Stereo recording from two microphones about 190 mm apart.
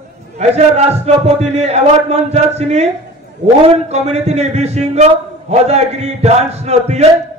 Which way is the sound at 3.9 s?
35° right (ahead or behind).